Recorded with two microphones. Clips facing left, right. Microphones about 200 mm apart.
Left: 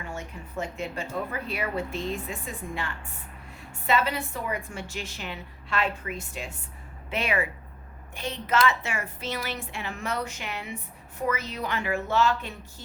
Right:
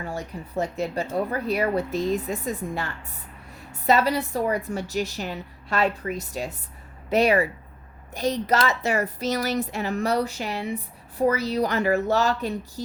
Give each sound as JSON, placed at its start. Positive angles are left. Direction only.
{"t": 0.0, "sound": "a woman's voice", "side_deg": -35}